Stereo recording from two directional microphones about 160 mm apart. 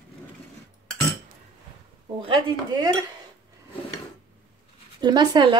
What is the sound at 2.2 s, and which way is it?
Speech, 30° right (ahead or behind).